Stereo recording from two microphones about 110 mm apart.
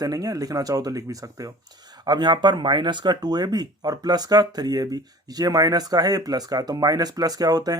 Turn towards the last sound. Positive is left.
turn(degrees=-35)  # may be behind; listen again after turning